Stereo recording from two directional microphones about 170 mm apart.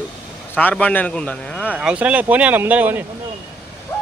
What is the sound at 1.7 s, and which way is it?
Speech, 5° right (ahead or behind).